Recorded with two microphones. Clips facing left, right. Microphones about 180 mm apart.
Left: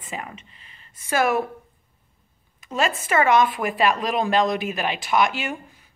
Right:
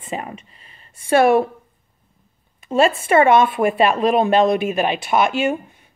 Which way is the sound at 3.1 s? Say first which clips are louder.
Right 3 dB; 30° right (ahead or behind).